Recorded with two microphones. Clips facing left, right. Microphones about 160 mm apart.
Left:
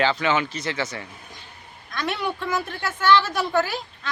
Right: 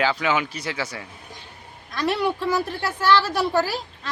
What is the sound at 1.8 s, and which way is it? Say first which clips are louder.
A woman's voice: right 4 dB; 35° right (ahead or behind).